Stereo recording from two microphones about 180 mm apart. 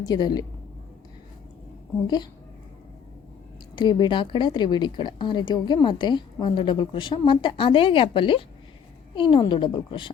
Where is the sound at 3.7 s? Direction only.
25° left (ahead or behind).